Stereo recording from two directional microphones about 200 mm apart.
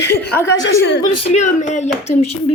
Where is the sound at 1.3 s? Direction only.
35° left (ahead or behind).